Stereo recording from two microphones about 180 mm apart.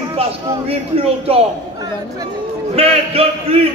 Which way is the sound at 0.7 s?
35° right (ahead or behind).